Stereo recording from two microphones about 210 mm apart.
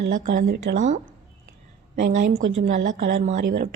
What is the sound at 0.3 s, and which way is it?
Speech, 45° right (ahead or behind).